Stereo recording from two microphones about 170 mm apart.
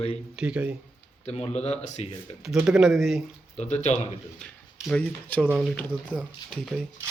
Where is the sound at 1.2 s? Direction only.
40° left (ahead or behind).